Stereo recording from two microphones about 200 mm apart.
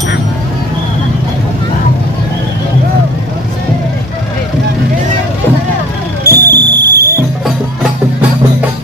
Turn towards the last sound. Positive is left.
turn(degrees=-55)  # may be behind; listen again after turning